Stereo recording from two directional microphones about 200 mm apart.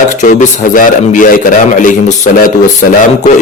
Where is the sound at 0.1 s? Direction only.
40° left (ahead or behind).